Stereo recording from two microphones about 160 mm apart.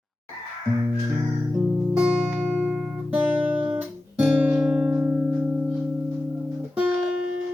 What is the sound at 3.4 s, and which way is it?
Guitar, 35° right (ahead or behind).